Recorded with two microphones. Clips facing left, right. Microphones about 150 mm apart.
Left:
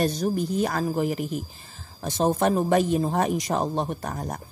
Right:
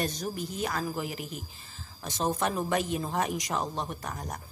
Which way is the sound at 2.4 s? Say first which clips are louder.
Left 8 dB; 40° left (ahead or behind).